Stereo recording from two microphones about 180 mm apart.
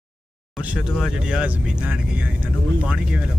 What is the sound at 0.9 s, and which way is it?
Speech, 5° right (ahead or behind).